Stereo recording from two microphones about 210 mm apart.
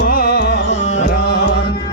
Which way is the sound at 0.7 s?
35° left (ahead or behind).